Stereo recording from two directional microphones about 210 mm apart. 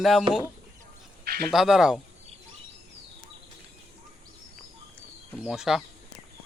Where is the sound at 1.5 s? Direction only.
Centre (ahead or behind).